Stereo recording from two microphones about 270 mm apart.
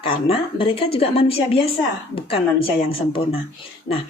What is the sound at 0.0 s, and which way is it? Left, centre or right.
A woman's voice, centre.